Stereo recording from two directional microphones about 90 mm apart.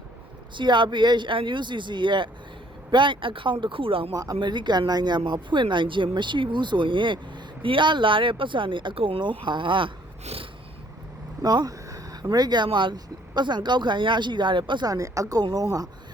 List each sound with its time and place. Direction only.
0.5 s speech: 60° right (ahead or behind); by 4.1 s 85° right
4.1 s speech: 45° right (ahead or behind); by 9.9 s 65° right (ahead or behind)
11.4 s speech: 45° right (ahead or behind); by 14.8 s 60° right (ahead or behind)
14.8 s speech: 40° right (ahead or behind)